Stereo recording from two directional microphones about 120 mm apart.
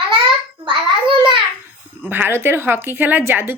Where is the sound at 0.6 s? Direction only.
45° right (ahead or behind).